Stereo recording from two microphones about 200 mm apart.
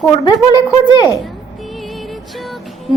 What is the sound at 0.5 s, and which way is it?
Speech, 20° left (ahead or behind).